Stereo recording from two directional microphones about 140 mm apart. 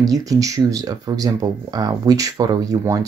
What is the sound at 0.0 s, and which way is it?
Speech, 25° right (ahead or behind).